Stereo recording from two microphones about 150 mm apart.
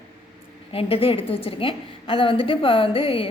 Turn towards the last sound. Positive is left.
turn(degrees=35)  # may be behind; listen again after turning